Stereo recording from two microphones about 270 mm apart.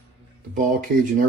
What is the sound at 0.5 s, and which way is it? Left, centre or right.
Speech, right.